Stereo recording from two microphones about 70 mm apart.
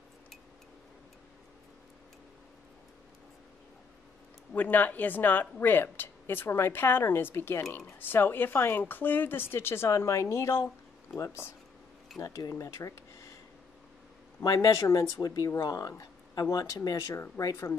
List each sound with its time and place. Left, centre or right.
4.6 s a woman's voice: left
14.4 s speech: left